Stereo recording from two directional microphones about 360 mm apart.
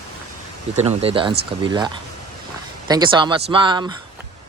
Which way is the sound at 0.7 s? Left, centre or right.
Centre.